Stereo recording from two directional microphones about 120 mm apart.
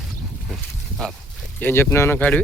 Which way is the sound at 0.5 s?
Centre (ahead or behind).